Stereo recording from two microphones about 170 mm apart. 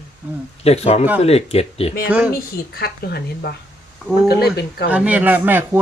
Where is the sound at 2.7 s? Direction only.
65° left (ahead or behind).